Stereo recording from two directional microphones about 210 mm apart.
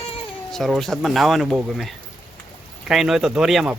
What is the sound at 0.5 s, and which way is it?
Speech, centre (ahead or behind).